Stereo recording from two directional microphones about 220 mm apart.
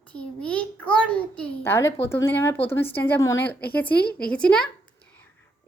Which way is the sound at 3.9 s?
45° left (ahead or behind).